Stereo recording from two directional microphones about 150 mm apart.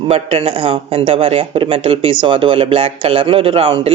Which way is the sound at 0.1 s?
40° right (ahead or behind).